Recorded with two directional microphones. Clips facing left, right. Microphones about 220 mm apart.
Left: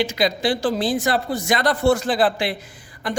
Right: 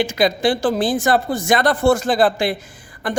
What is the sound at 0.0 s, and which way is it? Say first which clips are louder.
A man's voice: right 3 dB; 50° right (ahead or behind).